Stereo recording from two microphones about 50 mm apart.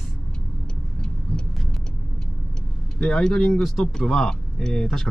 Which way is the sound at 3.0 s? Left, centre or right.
Centre.